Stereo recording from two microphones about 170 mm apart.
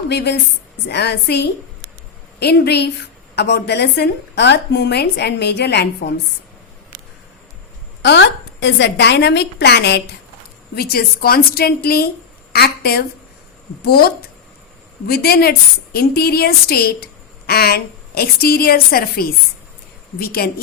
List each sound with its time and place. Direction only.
0.1 s a woman's voice: 75° left (ahead or behind)
8.0 s a woman's voice: 90° left
10.8 s a woman's voice: 65° left (ahead or behind)